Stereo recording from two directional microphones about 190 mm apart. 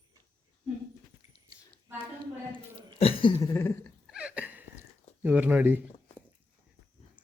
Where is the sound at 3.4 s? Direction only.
15° left (ahead or behind).